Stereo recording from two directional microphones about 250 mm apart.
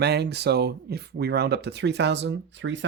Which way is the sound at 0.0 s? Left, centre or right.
Right.